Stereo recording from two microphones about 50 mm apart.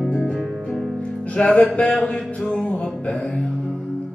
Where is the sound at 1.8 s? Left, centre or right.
Centre.